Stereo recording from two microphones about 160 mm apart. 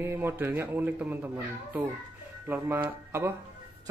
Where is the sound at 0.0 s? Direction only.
15° right (ahead or behind).